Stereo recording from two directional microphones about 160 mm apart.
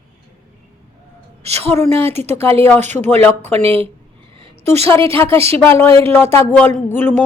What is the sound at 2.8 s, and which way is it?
Speech, 45° right (ahead or behind).